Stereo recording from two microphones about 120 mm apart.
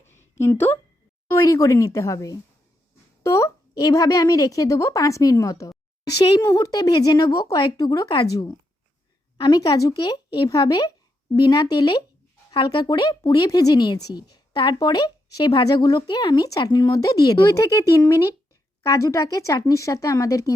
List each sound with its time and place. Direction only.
0.3 s speech: 20° left (ahead or behind)